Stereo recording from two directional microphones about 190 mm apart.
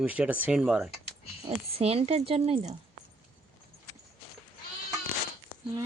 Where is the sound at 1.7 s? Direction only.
30° right (ahead or behind).